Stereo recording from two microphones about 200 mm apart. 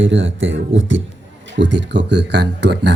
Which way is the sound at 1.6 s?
65° right (ahead or behind).